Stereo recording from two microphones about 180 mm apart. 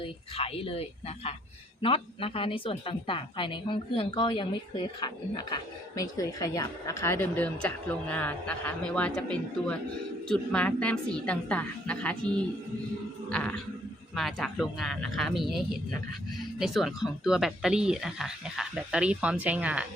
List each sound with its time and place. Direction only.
0.0 s a woman's voice: 30° left (ahead or behind); by 19.9 s 5° right (ahead or behind)